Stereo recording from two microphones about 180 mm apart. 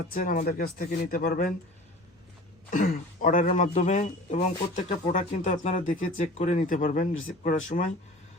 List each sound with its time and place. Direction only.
0.1 s speech: 50° left (ahead or behind)
2.6 s speech: 45° left (ahead or behind)